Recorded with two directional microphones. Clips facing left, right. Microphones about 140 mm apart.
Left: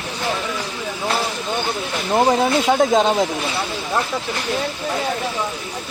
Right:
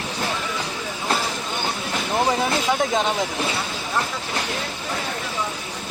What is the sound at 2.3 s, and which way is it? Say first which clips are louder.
Speech: left 6 dB; 45° left (ahead or behind).